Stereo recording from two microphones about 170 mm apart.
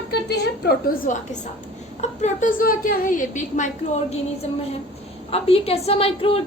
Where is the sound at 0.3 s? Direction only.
70° left (ahead or behind).